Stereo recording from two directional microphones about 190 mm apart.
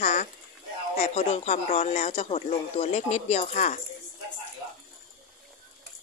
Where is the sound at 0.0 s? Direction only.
35° left (ahead or behind).